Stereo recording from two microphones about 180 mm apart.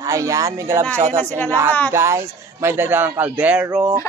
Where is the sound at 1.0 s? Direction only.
40° right (ahead or behind).